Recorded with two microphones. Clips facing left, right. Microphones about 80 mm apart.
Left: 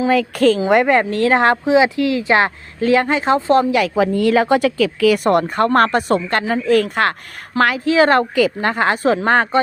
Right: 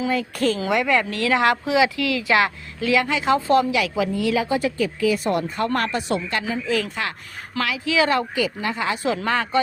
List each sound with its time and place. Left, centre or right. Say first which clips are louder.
0.1 s speech: left 8 dB; left
7.6 s speech: left 8 dB; left